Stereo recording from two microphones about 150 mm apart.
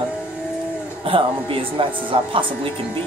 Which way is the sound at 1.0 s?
35° right (ahead or behind).